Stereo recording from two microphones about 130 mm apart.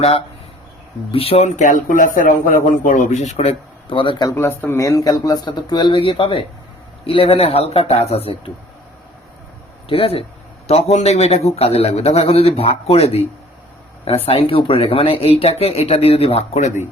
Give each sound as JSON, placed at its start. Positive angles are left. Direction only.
{"t": 1.1, "sound": "speech", "side_deg": 50}
{"t": 4.3, "sound": "a man's voice", "side_deg": 15}
{"t": 9.9, "sound": "a man's voice", "side_deg": 45}
{"t": 14.3, "sound": "a man's voice", "side_deg": 45}